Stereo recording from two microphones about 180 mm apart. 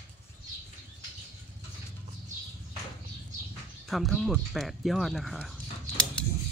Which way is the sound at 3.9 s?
Centre (ahead or behind).